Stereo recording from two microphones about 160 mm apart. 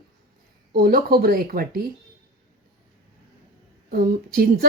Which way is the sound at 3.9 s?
65° right (ahead or behind).